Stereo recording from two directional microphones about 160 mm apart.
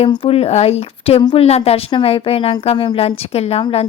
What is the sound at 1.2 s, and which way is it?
Speech, 30° left (ahead or behind).